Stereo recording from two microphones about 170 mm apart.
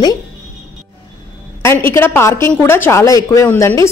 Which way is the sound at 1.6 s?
15° left (ahead or behind).